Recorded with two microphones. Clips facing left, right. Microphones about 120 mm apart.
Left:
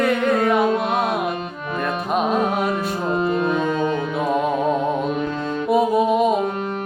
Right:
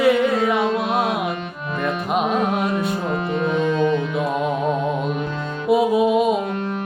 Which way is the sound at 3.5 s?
40° left (ahead or behind).